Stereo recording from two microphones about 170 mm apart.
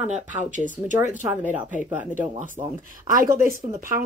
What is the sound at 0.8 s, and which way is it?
Speech, 10° right (ahead or behind).